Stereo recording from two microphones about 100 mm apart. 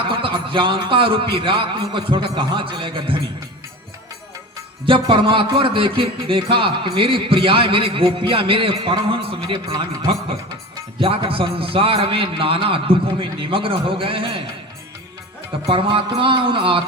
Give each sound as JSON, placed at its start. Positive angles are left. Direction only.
{"t": 0.1, "sound": "speech", "side_deg": -55}
{"t": 4.9, "sound": "speech", "side_deg": -55}
{"t": 15.6, "sound": "speech", "side_deg": -65}